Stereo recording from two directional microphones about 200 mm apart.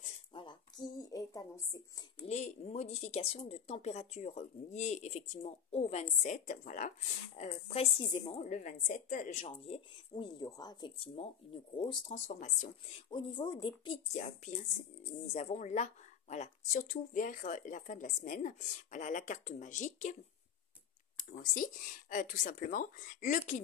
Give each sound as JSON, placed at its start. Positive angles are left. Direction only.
{"t": 0.3, "sound": "speech", "side_deg": 25}
{"t": 2.2, "sound": "a woman's voice", "side_deg": 35}
{"t": 12.3, "sound": "speech", "side_deg": 35}
{"t": 13.1, "sound": "a woman's voice", "side_deg": 20}
{"t": 21.2, "sound": "speech", "side_deg": 45}